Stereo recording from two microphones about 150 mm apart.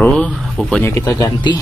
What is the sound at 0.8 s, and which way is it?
Speech, 20° left (ahead or behind).